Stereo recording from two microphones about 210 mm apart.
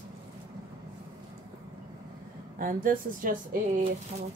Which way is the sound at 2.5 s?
40° right (ahead or behind).